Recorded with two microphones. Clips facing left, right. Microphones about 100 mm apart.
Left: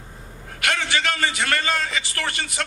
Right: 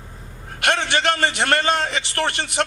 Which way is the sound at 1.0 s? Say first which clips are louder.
Right 4 dB; 60° right (ahead or behind).